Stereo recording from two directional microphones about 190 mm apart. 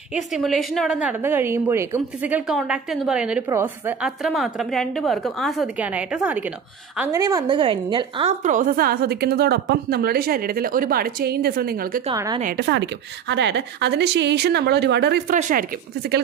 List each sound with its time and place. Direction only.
0.1 s a woman's voice: centre (ahead or behind)
7.1 s a woman's voice: 20° right (ahead or behind)
8.5 s a woman's voice: 45° right (ahead or behind)
12.1 s a woman's voice: 20° right (ahead or behind)
12.5 s a woman's voice: 65° right (ahead or behind)
15.3 s speech: 40° right (ahead or behind)